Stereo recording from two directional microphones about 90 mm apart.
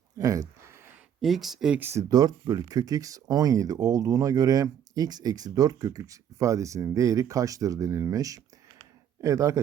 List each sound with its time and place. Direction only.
0.2 s speech: 40° right (ahead or behind)
1.2 s speech: 5° right (ahead or behind)
1.8 s speech: 30° right (ahead or behind)
2.0 s speech: 45° right (ahead or behind)
8.8 s a sound: 35° right (ahead or behind)